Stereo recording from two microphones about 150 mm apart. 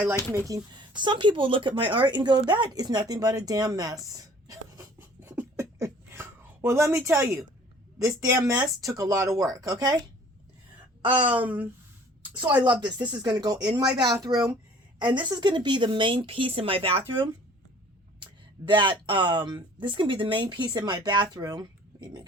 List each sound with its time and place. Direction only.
0.3 s speech: 25° right (ahead or behind)
11.3 s speech: 10° right (ahead or behind)
12.8 s speech: 30° right (ahead or behind)